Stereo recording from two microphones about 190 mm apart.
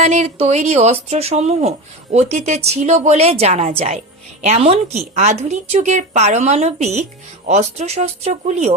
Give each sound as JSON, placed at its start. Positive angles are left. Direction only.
{"t": 0.0, "sound": "a woman's voice", "side_deg": -35}